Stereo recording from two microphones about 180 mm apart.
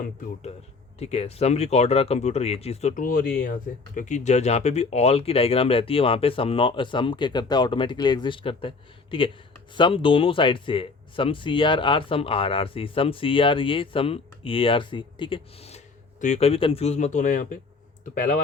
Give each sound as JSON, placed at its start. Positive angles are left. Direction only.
{"t": 0.9, "sound": "speech", "side_deg": 35}